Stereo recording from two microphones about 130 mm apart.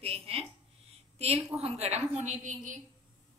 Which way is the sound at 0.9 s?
50° right (ahead or behind).